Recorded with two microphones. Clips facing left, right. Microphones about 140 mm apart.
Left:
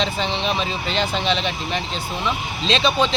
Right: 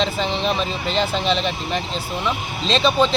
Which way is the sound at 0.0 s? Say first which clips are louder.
Right 2 dB; centre (ahead or behind).